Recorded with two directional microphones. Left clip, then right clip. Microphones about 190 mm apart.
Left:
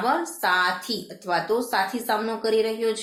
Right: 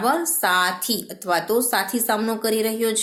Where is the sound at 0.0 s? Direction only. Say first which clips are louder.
Right 2 dB; 45° right (ahead or behind).